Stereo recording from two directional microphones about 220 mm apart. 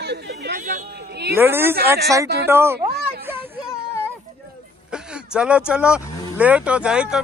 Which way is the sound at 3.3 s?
10° right (ahead or behind).